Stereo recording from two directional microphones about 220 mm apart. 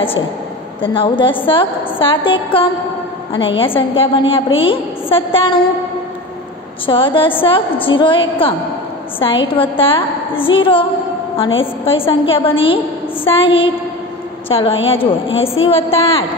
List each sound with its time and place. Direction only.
0.8 s a woman's voice: 25° left (ahead or behind)
6.9 s a woman's voice: 25° left (ahead or behind)